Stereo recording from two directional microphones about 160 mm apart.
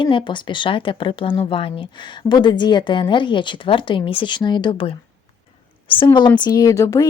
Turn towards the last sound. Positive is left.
turn(degrees=20)  # may be behind; listen again after turning